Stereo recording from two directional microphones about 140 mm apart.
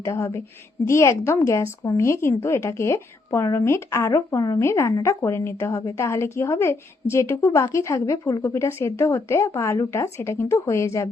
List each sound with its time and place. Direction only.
0.0 s a woman's voice: 20° left (ahead or behind)